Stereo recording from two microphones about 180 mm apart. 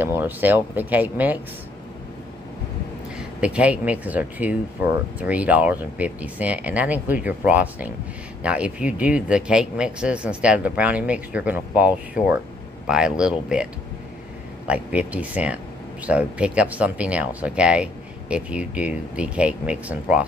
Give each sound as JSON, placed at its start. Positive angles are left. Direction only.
{"t": 0.0, "sound": "speech", "side_deg": -10}
{"t": 3.2, "sound": "speech", "side_deg": -5}
{"t": 14.7, "sound": "speech", "side_deg": -5}